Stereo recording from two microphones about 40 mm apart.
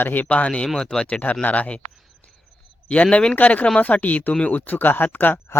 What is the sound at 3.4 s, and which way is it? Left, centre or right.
Speech, left.